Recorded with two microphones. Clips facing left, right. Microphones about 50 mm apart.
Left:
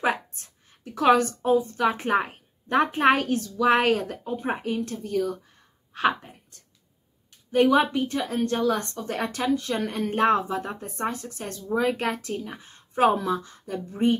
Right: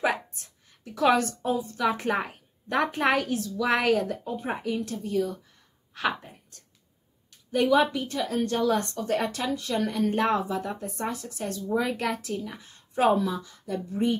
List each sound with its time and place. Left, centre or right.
0.0 s a woman's voice: left
7.5 s speech: left